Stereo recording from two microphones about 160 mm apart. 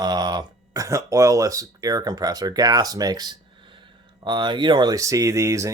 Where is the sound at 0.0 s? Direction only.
25° right (ahead or behind).